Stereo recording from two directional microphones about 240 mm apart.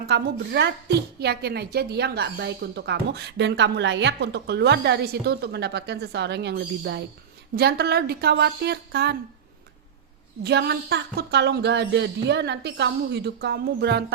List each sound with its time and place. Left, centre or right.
0.1 s a woman's voice: right
10.4 s a woman's voice: right